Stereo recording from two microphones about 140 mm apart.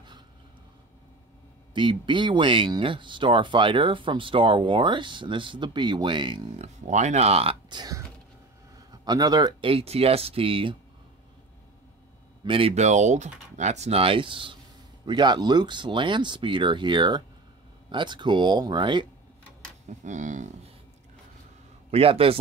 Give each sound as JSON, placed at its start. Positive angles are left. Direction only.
{"t": 1.7, "sound": "speech", "side_deg": -35}
{"t": 6.6, "sound": "speech", "side_deg": -55}
{"t": 7.7, "sound": "speech", "side_deg": -30}
{"t": 12.4, "sound": "speech", "side_deg": -40}
{"t": 19.9, "sound": "speech", "side_deg": -60}
{"t": 21.9, "sound": "speech", "side_deg": -40}